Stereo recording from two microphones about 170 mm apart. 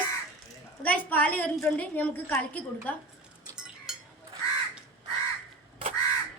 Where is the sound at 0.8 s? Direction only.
10° left (ahead or behind).